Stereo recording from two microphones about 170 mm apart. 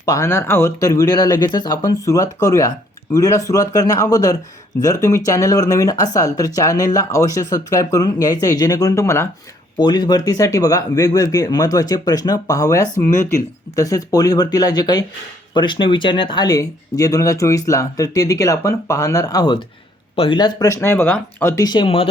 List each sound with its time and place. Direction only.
0.0 s speech: 20° left (ahead or behind)